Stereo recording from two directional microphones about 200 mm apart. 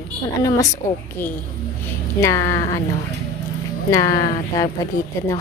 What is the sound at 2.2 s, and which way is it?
Speech, 15° left (ahead or behind).